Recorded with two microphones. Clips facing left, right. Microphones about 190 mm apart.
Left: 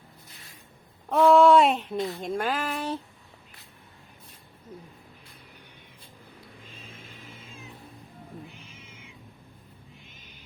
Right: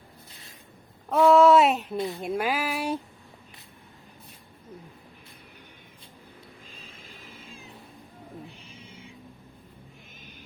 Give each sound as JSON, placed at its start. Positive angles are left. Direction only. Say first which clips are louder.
{"t": 1.1, "sound": "speech", "louder": "even", "side_deg": 0}
{"t": 8.4, "sound": "owl", "louder": "right 1 dB", "side_deg": -35}